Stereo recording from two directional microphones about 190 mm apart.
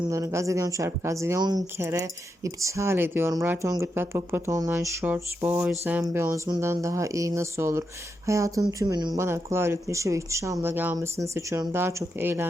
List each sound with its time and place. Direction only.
0.1 s speech: 15° right (ahead or behind)